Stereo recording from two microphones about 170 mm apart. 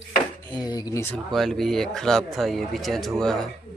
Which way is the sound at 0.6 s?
25° left (ahead or behind).